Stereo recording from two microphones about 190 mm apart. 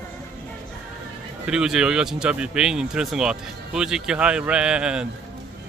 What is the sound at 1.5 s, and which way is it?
Speech, 5° right (ahead or behind).